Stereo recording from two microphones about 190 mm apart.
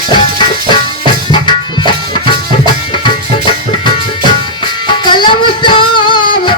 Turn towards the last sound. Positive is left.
turn(degrees=25)  # may be behind; listen again after turning